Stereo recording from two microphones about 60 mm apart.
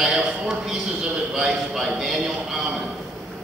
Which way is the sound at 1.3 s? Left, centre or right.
Centre.